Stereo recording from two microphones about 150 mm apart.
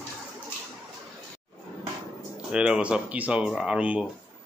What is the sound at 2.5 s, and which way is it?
A man's voice, 5° right (ahead or behind).